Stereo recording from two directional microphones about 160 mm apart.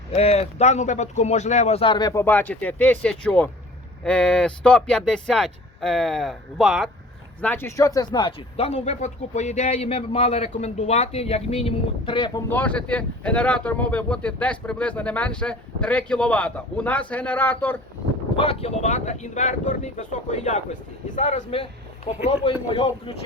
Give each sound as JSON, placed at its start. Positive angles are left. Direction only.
{"t": 0.1, "sound": "speech", "side_deg": 40}
{"t": 2.2, "sound": "speech", "side_deg": 10}
{"t": 7.4, "sound": "speech", "side_deg": 15}
{"t": 8.5, "sound": "a man's voice", "side_deg": 40}
{"t": 12.5, "sound": "speech", "side_deg": 10}
{"t": 18.3, "sound": "speech", "side_deg": 40}
{"t": 21.5, "sound": "a man's voice", "side_deg": 40}